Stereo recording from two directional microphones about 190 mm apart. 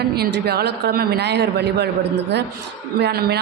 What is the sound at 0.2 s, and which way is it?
A man's voice, 60° right (ahead or behind).